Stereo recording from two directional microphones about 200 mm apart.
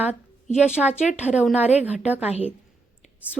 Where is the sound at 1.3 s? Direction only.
5° right (ahead or behind).